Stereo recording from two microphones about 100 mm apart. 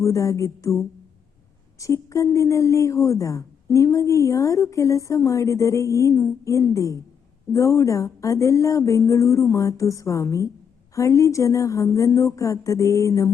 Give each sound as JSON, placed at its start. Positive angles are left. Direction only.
{"t": 0.0, "sound": "a woman's voice", "side_deg": 30}